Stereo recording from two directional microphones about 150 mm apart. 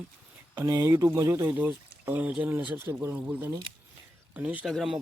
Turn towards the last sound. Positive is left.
turn(degrees=0)  # may be behind; listen again after turning